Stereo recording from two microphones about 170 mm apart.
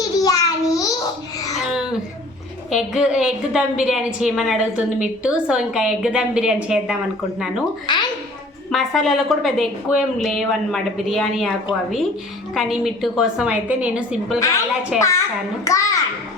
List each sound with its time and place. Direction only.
0.2 s babbling: 20° left (ahead or behind)
1.5 s babbling: 5° right (ahead or behind)
2.6 s a woman's voice: centre (ahead or behind)
7.9 s a sound: 25° left (ahead or behind)
8.7 s a woman's voice: centre (ahead or behind)
15.6 s a child's voice: 20° left (ahead or behind)